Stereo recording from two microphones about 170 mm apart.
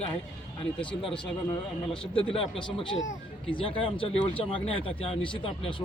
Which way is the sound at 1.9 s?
5° left (ahead or behind).